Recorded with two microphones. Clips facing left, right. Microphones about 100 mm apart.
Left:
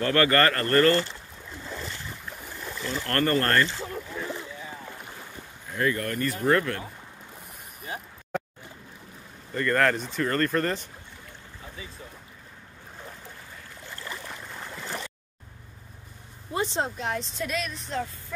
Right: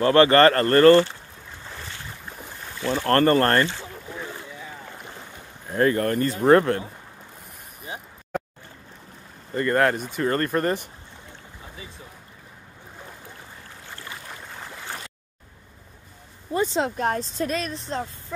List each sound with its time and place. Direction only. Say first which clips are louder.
0.0 s speech: right 7 dB; 25° right (ahead or behind)
2.9 s speech: right 7 dB; 35° right (ahead or behind)
5.7 s speech: right 6 dB; 40° right (ahead or behind)
9.5 s speech: right 3 dB; 10° right (ahead or behind)
16.9 s speech: right 6 dB; 45° right (ahead or behind)